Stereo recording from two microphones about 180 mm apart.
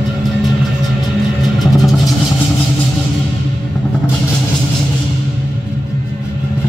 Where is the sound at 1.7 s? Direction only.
Centre (ahead or behind).